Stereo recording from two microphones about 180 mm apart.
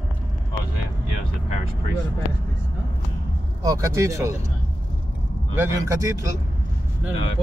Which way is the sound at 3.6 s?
20° right (ahead or behind).